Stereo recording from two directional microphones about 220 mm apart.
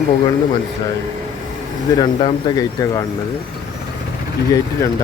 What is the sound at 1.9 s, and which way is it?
Speech, 20° left (ahead or behind).